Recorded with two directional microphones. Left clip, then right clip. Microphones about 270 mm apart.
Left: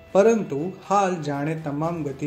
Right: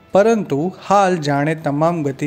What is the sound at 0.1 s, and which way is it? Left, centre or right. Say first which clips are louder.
Speech: right 4 dB; right.